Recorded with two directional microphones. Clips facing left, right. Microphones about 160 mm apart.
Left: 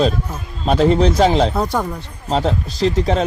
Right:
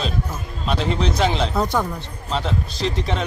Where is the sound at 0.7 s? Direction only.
40° left (ahead or behind).